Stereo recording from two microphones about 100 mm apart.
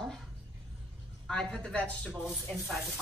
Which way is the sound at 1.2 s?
5° left (ahead or behind).